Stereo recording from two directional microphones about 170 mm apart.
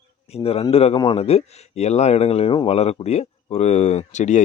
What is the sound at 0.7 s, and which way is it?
Speech, 35° left (ahead or behind).